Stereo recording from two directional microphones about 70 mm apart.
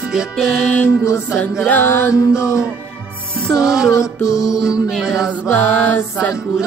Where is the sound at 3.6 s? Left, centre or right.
Centre.